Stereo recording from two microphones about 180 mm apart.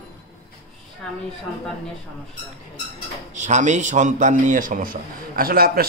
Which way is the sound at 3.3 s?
40° right (ahead or behind).